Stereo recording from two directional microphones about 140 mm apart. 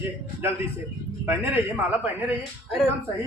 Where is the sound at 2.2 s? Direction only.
5° right (ahead or behind).